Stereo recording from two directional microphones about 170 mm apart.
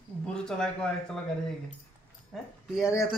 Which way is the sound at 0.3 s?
5° left (ahead or behind).